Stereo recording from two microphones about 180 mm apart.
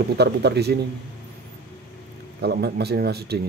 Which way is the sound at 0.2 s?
65° right (ahead or behind).